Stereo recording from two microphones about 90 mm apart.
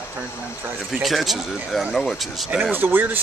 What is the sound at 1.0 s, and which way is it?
Speech, centre (ahead or behind).